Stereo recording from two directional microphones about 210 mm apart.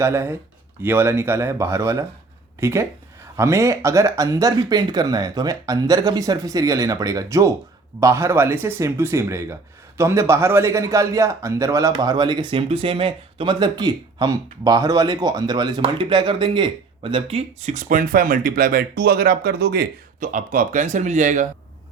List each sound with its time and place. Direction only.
0.0 s a man's voice: 10° right (ahead or behind); by 21.4 s 35° right (ahead or behind)